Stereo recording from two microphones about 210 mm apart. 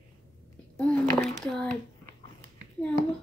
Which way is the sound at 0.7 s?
5° left (ahead or behind).